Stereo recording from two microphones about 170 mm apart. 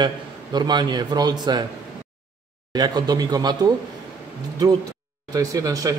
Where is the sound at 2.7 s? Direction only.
25° right (ahead or behind).